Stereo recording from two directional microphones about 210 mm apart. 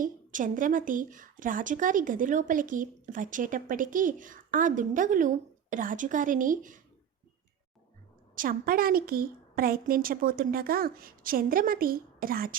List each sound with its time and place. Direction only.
0.0 s speech: 40° right (ahead or behind)
8.4 s a woman's voice: 40° right (ahead or behind)